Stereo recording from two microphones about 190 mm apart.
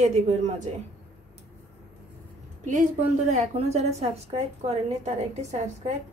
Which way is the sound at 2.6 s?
40° right (ahead or behind).